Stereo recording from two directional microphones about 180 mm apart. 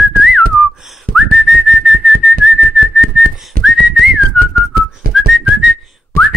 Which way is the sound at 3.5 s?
55° right (ahead or behind).